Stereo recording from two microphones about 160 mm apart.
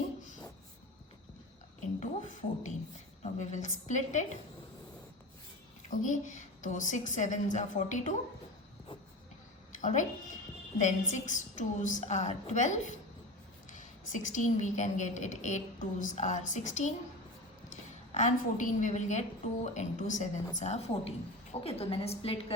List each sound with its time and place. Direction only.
2.0 s a woman's voice: 45° left (ahead or behind)
5.9 s a woman's voice: 50° left (ahead or behind)
9.8 s a woman's voice: 50° left (ahead or behind)
18.1 s a woman's voice: 50° left (ahead or behind)